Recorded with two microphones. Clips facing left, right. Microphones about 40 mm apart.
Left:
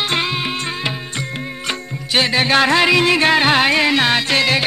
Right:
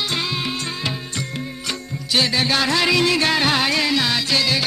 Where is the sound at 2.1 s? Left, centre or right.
Left.